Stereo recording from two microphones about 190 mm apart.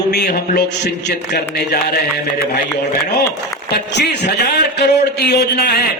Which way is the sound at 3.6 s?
60° left (ahead or behind).